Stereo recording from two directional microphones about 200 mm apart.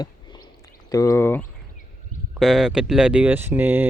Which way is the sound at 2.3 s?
Centre (ahead or behind).